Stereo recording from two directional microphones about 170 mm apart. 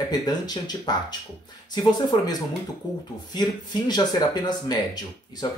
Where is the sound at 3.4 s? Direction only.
25° left (ahead or behind).